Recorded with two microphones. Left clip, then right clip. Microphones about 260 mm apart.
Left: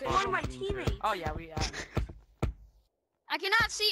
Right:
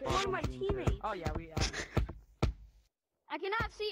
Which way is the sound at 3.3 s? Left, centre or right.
Left.